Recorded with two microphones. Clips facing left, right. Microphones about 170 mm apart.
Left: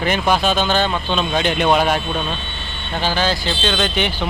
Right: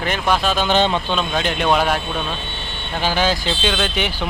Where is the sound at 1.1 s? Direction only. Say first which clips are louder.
Left 2 dB; centre (ahead or behind).